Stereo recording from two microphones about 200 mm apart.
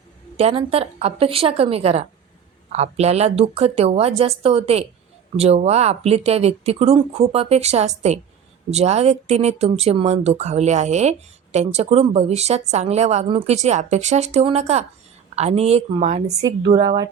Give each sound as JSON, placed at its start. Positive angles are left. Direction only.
{"t": 0.3, "sound": "a woman's voice", "side_deg": -30}